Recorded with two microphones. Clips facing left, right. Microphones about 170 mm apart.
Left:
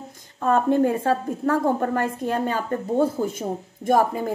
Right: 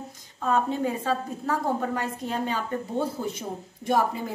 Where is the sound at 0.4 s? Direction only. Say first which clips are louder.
Left 6 dB; 50° left (ahead or behind).